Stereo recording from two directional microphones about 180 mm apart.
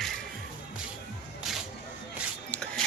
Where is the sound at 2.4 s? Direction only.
10° left (ahead or behind).